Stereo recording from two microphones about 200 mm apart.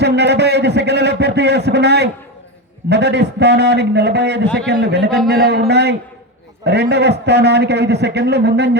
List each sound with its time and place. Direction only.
0.0 s a man's voice: 55° right (ahead or behind)